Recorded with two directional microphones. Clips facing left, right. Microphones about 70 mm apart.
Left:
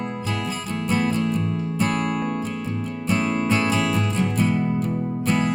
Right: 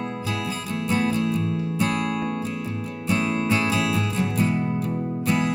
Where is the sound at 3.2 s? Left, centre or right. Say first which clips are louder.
Left 1 dB; left.